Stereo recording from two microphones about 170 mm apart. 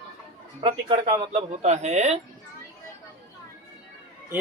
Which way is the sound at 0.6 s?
30° right (ahead or behind).